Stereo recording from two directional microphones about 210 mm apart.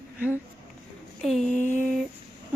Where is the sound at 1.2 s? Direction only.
Centre (ahead or behind).